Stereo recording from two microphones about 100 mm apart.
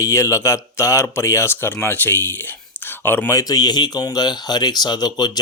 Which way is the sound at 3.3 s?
35° left (ahead or behind).